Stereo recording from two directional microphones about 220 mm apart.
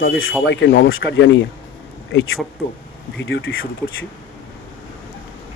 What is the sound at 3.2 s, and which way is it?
Speech, 65° left (ahead or behind).